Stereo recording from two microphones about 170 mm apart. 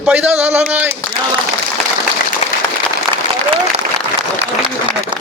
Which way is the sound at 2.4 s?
40° left (ahead or behind).